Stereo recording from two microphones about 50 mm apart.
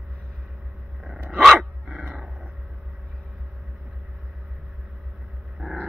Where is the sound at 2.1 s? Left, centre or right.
Right.